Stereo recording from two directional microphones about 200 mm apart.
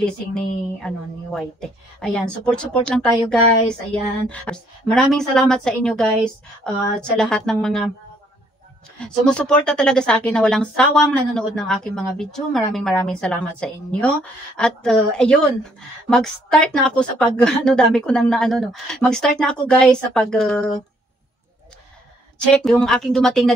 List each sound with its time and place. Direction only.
0.8 s a woman's voice: 5° left (ahead or behind)
9.0 s a woman's voice: 5° left (ahead or behind)
22.4 s a woman's voice: 5° left (ahead or behind)